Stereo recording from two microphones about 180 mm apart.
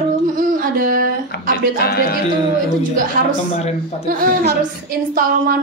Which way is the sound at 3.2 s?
50° right (ahead or behind).